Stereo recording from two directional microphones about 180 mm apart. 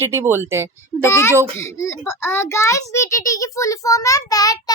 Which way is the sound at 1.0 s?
15° left (ahead or behind).